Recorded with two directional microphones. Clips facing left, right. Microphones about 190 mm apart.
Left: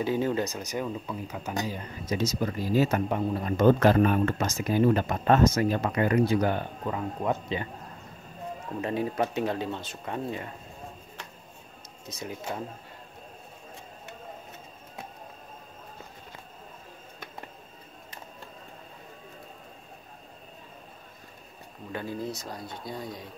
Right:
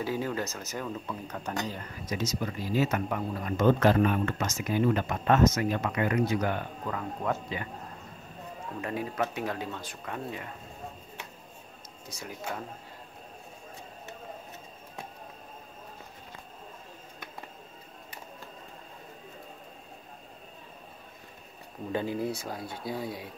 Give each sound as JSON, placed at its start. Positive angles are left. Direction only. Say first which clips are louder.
{"t": 0.0, "sound": "speech", "louder": "left 5 dB", "side_deg": 25}
{"t": 1.8, "sound": "speech", "louder": "left 4 dB", "side_deg": 30}
{"t": 8.8, "sound": "speech", "louder": "left 4 dB", "side_deg": 25}
{"t": 12.1, "sound": "speech", "louder": "left 5 dB", "side_deg": 20}
{"t": 22.0, "sound": "speech", "louder": "even", "side_deg": -15}
{"t": 22.5, "sound": "speech", "louder": "right 2 dB", "side_deg": -5}